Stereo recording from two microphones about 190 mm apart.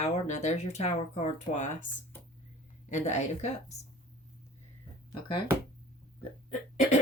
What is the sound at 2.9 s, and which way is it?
Speech, 35° left (ahead or behind).